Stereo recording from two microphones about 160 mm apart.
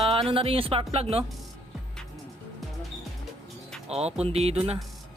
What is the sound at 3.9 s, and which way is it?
Speech, 40° right (ahead or behind).